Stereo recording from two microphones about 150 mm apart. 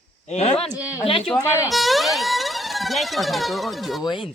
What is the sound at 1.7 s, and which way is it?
Speech, centre (ahead or behind).